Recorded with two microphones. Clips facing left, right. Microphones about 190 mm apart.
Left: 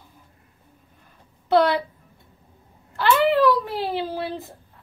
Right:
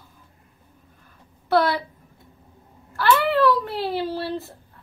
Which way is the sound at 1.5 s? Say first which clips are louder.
Left 2 dB; 20° left (ahead or behind).